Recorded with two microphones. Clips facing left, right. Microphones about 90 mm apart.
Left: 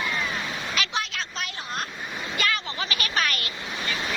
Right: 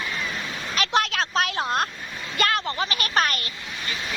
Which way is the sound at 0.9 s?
65° right (ahead or behind).